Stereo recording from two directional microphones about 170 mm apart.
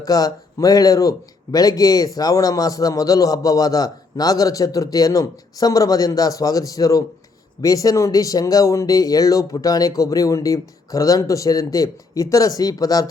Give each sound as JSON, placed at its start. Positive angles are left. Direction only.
{"t": 0.0, "sound": "a man's voice", "side_deg": 20}